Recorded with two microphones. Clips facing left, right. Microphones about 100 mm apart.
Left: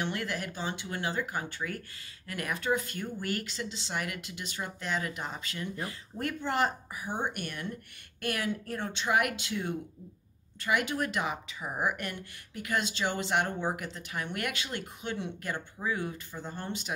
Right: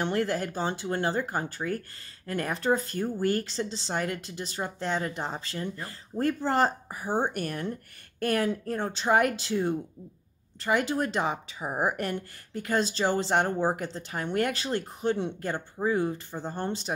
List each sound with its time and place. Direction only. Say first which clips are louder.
0.0 s a woman's voice: right 6 dB; 35° right (ahead or behind)